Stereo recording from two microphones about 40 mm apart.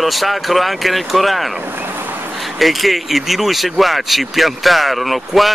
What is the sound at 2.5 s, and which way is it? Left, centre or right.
Speech, centre.